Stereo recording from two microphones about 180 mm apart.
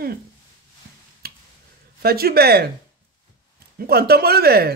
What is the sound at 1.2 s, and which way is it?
Finger snapping, 60° right (ahead or behind).